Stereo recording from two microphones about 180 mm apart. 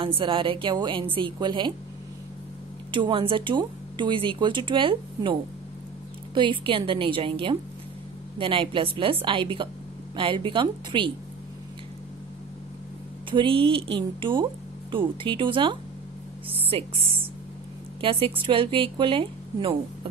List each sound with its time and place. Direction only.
0.0 s speech: 30° right (ahead or behind)
2.9 s speech: 25° right (ahead or behind)
13.3 s speech: 30° right (ahead or behind)